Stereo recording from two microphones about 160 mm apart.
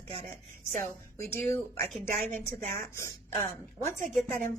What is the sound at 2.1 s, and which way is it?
Speech, 55° right (ahead or behind).